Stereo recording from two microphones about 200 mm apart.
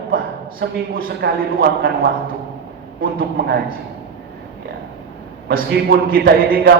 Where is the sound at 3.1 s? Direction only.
45° right (ahead or behind).